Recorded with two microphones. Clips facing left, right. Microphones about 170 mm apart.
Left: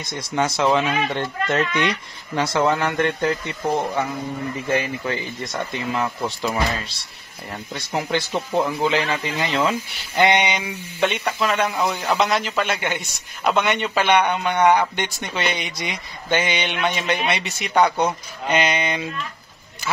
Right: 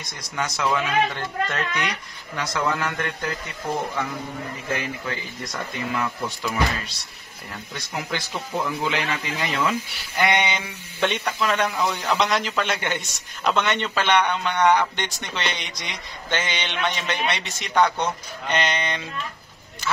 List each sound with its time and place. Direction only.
0.1 s speech: 25° left (ahead or behind)
5.9 s speech: 30° left (ahead or behind)
7.7 s speech: 30° left (ahead or behind)
11.0 s a man's voice: 5° left (ahead or behind)